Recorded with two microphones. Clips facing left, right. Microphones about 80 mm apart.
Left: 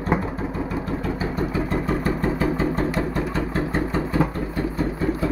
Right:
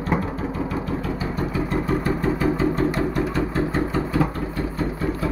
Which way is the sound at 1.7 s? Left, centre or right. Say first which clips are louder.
Right 1 dB; left.